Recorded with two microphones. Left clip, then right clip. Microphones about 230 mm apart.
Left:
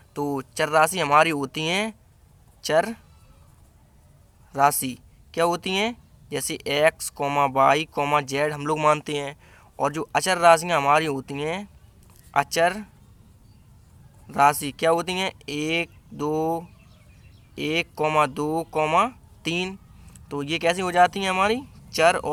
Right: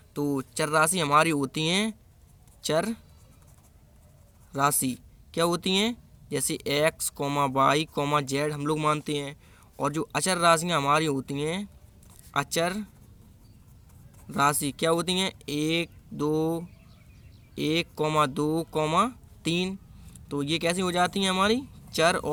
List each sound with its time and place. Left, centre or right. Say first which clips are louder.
0.1 s speech: left 2 dB; right
4.5 s speech: left 5 dB; right
14.3 s speech: left 6 dB; right